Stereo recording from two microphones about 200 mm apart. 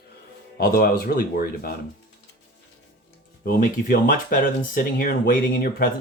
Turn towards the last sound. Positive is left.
turn(degrees=45)  # may be behind; listen again after turning